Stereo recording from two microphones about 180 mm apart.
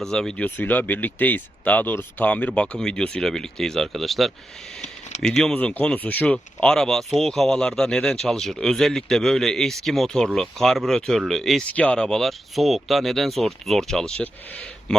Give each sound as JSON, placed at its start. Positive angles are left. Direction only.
{"t": 0.0, "sound": "speech", "side_deg": 5}
{"t": 4.8, "sound": "a sound", "side_deg": 40}
{"t": 5.4, "sound": "speech", "side_deg": 5}